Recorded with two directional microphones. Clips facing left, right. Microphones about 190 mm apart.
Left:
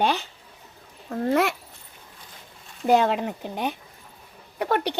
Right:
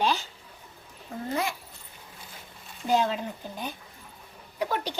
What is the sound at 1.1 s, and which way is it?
Speech, 75° left (ahead or behind).